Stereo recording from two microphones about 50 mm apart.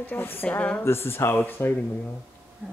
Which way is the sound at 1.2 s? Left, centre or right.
Left.